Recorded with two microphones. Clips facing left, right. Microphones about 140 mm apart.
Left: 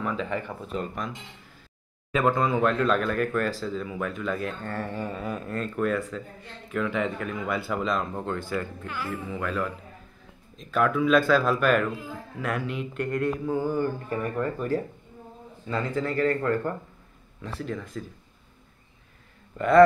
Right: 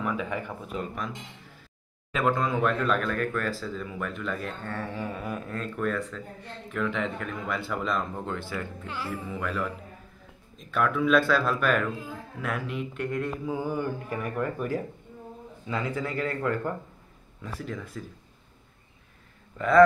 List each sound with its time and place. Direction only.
0.0 s speech: 10° right (ahead or behind)
2.1 s speech: centre (ahead or behind)
8.8 s speech: 30° right (ahead or behind)
9.1 s speech: 5° right (ahead or behind)
10.6 s speech: centre (ahead or behind)
13.6 s speech: 15° right (ahead or behind)